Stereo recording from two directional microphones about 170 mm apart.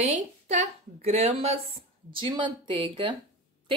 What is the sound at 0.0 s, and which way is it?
A woman's voice, 45° right (ahead or behind).